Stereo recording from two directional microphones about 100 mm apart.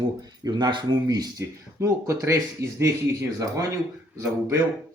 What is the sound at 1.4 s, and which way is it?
Speech, 30° right (ahead or behind).